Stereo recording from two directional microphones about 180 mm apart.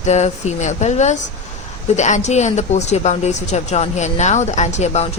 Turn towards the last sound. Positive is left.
turn(degrees=35)  # may be behind; listen again after turning